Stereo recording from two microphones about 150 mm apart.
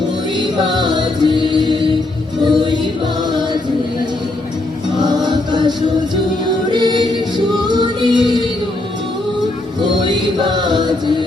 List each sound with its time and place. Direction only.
0.3 s music: 30° right (ahead or behind)
4.9 s music: 30° right (ahead or behind)
10.0 s music: 30° right (ahead or behind)